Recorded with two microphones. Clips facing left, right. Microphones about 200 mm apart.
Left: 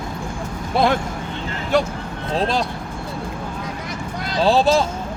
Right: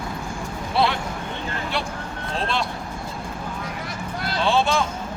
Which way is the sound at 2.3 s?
40° left (ahead or behind).